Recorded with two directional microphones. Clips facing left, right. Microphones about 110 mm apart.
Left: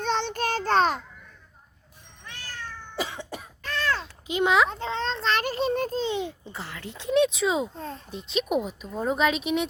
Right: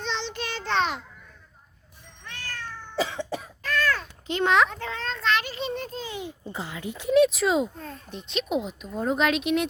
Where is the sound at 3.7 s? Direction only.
25° left (ahead or behind).